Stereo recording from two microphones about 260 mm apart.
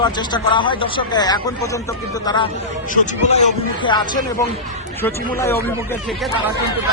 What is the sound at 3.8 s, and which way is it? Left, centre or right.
Speech, centre.